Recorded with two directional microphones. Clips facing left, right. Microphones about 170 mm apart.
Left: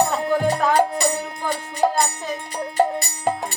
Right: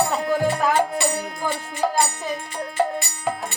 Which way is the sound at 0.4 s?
40° left (ahead or behind).